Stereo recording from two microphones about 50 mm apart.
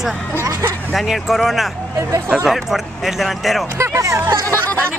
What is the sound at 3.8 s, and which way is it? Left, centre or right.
Speech, right.